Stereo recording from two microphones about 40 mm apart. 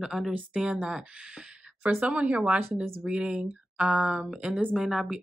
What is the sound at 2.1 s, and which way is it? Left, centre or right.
A woman's voice, right.